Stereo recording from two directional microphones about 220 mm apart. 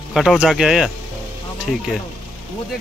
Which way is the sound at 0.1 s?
Centre (ahead or behind).